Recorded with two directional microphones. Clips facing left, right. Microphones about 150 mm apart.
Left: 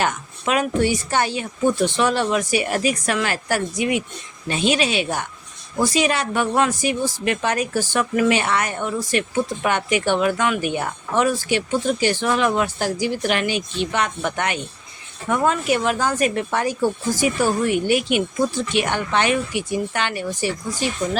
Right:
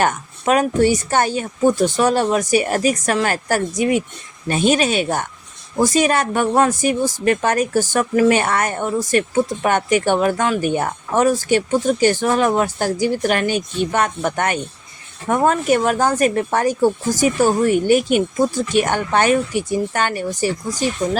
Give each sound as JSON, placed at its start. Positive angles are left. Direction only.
{"t": 0.0, "sound": "speech", "side_deg": -45}